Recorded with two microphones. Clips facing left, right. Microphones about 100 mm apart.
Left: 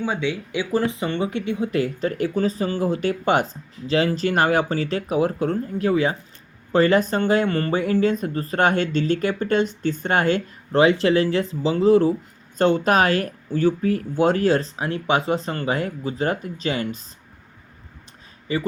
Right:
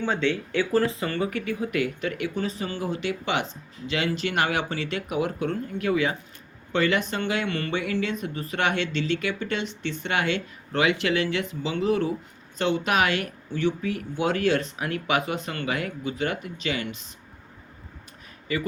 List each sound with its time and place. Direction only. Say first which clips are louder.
0.0 s speech: left 1 dB; 10° left (ahead or behind); by 17.0 s 40° left (ahead or behind)
18.5 s speech: left 3 dB; 30° left (ahead or behind)